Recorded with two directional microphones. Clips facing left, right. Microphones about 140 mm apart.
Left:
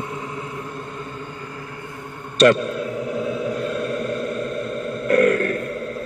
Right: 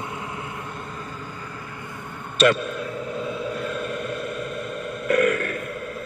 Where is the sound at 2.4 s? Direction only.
40° left (ahead or behind).